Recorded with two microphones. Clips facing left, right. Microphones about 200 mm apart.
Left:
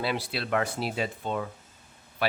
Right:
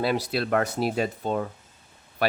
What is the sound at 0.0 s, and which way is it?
Speech, 45° right (ahead or behind).